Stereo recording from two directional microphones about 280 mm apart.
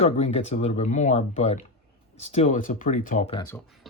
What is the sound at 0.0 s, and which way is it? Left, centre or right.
Speech, left.